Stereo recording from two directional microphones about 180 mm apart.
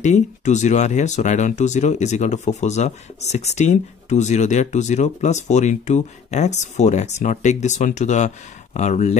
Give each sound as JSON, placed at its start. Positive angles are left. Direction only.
{"t": 0.0, "sound": "speech", "side_deg": 40}